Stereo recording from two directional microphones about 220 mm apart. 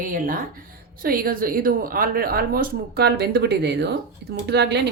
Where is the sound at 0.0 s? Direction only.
40° right (ahead or behind).